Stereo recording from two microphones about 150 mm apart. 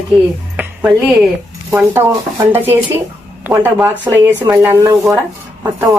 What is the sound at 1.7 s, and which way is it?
Speech, 20° right (ahead or behind).